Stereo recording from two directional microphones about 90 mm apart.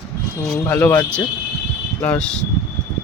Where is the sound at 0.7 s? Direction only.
20° left (ahead or behind).